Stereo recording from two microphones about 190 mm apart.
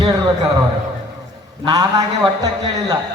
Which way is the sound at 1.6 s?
20° right (ahead or behind).